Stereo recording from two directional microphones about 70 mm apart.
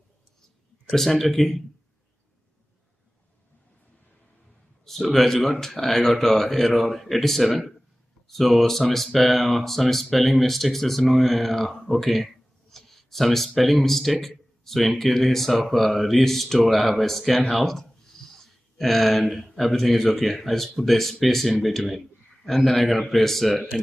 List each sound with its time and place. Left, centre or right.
0.8 s speech: centre
4.8 s speech: centre
11.9 s a sound: centre
13.6 s speech: centre